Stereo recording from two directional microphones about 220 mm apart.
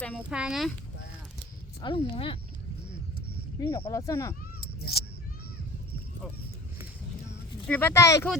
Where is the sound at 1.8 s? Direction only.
25° left (ahead or behind).